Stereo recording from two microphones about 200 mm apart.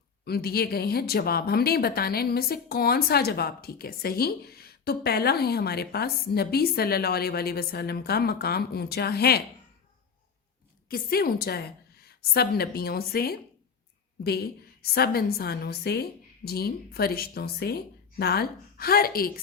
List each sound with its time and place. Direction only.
0.3 s speech: 50° left (ahead or behind)
10.8 s a woman's voice: 50° left (ahead or behind)